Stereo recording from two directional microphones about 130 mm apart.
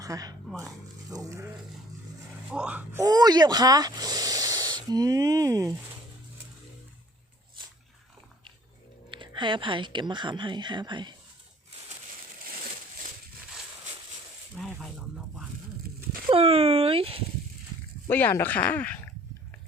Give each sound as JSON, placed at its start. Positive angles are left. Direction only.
{"t": 0.0, "sound": "zipper", "side_deg": -30}
{"t": 1.1, "sound": "speech", "side_deg": -25}
{"t": 2.5, "sound": "speech", "side_deg": -10}
{"t": 3.0, "sound": "speech", "side_deg": -30}
{"t": 9.0, "sound": "speech", "side_deg": -40}
{"t": 14.5, "sound": "a sound", "side_deg": -5}
{"t": 16.3, "sound": "speech", "side_deg": -50}
{"t": 18.1, "sound": "speech", "side_deg": 15}